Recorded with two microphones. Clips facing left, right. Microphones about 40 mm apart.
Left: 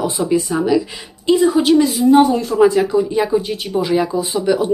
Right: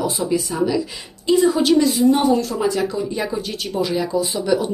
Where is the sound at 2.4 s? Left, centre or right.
Left.